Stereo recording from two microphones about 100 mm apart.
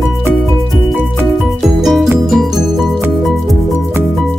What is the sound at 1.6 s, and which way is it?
Music, centre (ahead or behind).